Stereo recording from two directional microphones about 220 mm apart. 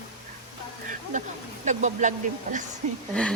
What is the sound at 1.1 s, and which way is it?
Speech, 35° right (ahead or behind).